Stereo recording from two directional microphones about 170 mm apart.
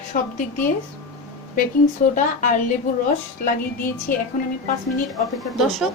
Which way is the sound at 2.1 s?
50° left (ahead or behind).